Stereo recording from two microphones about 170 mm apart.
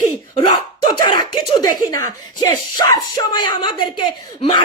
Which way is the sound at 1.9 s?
20° left (ahead or behind).